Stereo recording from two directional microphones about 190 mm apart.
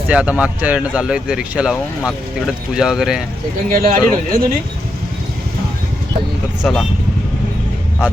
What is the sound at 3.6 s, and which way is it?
Speech, 50° right (ahead or behind).